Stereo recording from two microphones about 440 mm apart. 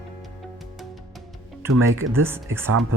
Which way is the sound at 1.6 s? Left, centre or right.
Right.